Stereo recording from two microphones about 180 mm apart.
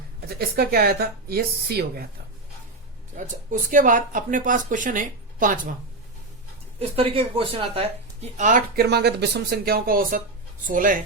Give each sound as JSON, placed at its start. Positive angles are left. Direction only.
{"t": 0.3, "sound": "speech", "side_deg": -60}
{"t": 3.2, "sound": "speech", "side_deg": -45}
{"t": 6.7, "sound": "speech", "side_deg": -35}